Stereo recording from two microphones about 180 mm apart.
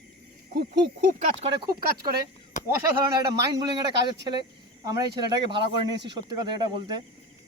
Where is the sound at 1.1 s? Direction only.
40° right (ahead or behind).